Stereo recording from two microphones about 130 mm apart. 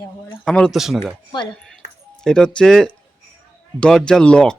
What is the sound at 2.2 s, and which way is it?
Speech, 5° left (ahead or behind).